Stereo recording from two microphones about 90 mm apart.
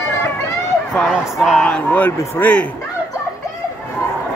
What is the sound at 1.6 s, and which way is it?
A man's voice, 15° left (ahead or behind).